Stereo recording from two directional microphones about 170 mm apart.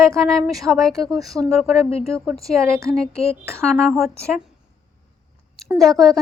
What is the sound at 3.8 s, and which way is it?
Speech, centre (ahead or behind).